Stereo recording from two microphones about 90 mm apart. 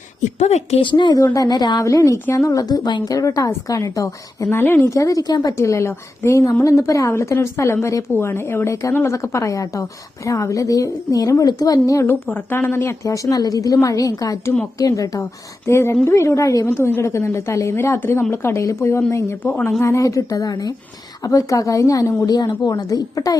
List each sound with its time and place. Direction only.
0.8 s speech: 60° left (ahead or behind)
1.1 s speech: 40° left (ahead or behind)
1.8 s a woman's voice: 35° left (ahead or behind)
3.2 s a woman's voice: 40° left (ahead or behind)
4.5 s speech: 25° left (ahead or behind)
4.9 s a woman's voice: 40° left (ahead or behind)
5.5 s a woman's voice: 35° left (ahead or behind)
12.0 s a woman's voice: 25° left (ahead or behind); by 15.3 s 40° left (ahead or behind)
15.6 s a woman's voice: 30° left (ahead or behind)
19.8 s a woman's voice: 35° left (ahead or behind)